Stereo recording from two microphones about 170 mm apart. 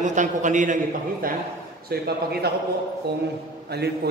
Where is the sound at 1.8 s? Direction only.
70° right (ahead or behind).